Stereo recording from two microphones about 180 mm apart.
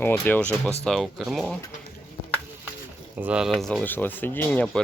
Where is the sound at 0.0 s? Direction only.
10° left (ahead or behind).